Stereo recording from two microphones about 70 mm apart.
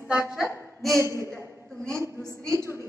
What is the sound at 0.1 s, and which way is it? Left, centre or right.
Speech, centre.